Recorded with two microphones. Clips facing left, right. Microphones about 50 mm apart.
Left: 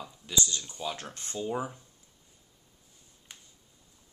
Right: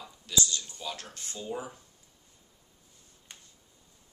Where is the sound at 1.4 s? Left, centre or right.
Centre.